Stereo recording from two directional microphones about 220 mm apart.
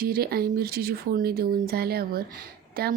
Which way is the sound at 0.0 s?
45° right (ahead or behind).